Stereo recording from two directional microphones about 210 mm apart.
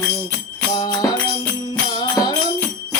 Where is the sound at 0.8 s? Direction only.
20° left (ahead or behind).